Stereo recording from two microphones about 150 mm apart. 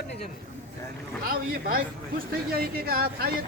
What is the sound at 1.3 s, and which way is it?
Speech, 75° right (ahead or behind).